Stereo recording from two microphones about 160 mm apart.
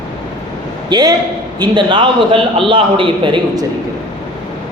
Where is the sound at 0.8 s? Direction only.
25° right (ahead or behind).